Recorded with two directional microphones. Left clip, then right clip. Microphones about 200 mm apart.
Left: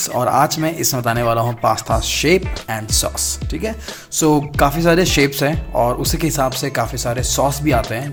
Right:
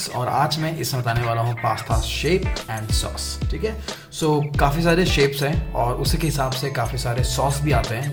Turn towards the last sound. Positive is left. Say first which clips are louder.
# left 5 dB
turn(degrees=35)  # may be behind; listen again after turning